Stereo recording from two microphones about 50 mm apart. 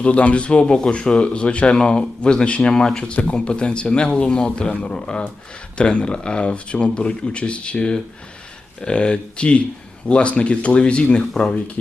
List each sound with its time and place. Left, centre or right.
0.0 s speech: left